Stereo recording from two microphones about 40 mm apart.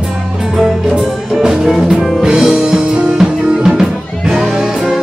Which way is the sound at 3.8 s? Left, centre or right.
Centre.